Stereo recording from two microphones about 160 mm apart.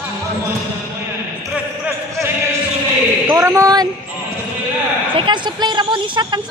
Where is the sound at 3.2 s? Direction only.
20° right (ahead or behind).